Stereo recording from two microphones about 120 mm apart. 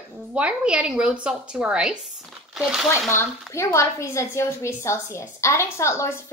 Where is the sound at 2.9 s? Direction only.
20° left (ahead or behind).